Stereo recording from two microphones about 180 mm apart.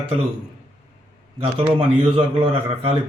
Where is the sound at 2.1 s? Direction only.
30° right (ahead or behind).